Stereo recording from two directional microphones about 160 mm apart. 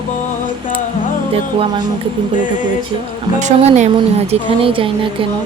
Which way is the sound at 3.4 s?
45° right (ahead or behind).